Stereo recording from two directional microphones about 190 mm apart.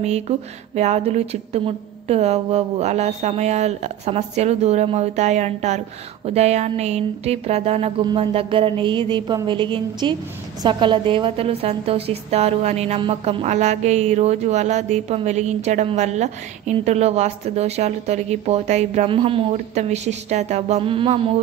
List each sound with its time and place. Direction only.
0.7 s a woman's voice: 35° right (ahead or behind)